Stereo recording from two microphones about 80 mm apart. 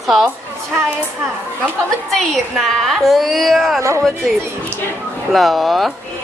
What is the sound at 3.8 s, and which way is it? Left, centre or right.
Speech, right.